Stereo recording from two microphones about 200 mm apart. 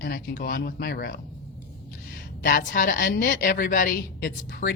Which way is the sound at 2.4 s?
45° left (ahead or behind).